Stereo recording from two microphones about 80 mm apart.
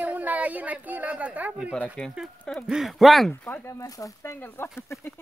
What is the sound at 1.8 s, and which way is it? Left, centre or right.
Speech, centre.